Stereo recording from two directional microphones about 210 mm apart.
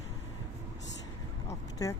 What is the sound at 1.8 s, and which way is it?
Speech, 15° left (ahead or behind).